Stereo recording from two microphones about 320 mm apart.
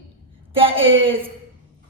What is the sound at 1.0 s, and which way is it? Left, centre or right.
Speech, centre.